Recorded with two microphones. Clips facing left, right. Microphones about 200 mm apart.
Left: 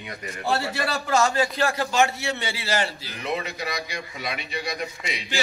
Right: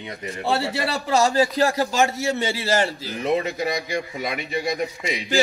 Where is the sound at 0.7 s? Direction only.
30° right (ahead or behind).